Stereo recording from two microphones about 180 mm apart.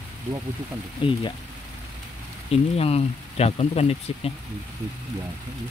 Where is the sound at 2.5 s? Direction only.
35° left (ahead or behind).